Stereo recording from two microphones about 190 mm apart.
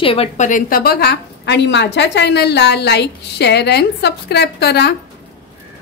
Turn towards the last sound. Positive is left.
turn(degrees=60)  # may be behind; listen again after turning